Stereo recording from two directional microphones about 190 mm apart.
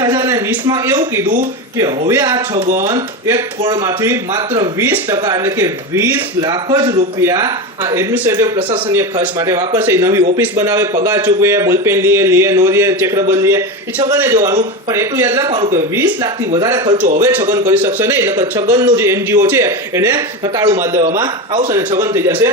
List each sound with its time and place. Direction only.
0.0 s a sound: 15° right (ahead or behind)
0.7 s speech: 15° right (ahead or behind)
2.6 s speech: 40° right (ahead or behind)
2.8 s speech: 15° right (ahead or behind)
14.9 s speech: 15° right (ahead or behind)
16.0 s speech: 10° right (ahead or behind)